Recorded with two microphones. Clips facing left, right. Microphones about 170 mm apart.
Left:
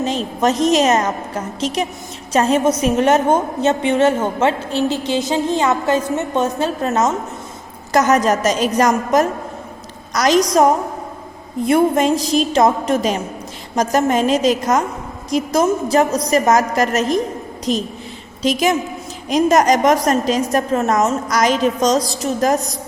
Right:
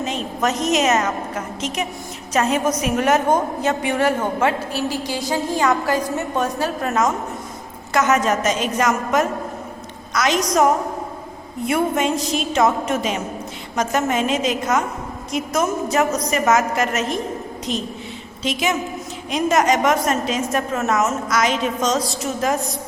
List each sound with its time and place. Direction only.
0.0 s a woman's voice: 30° left (ahead or behind)
7.9 s a woman's voice: 40° left (ahead or behind)